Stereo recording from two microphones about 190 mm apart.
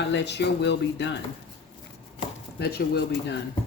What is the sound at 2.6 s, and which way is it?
Speech, 60° left (ahead or behind).